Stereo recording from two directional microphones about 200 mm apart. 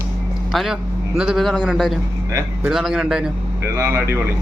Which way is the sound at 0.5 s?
Centre (ahead or behind).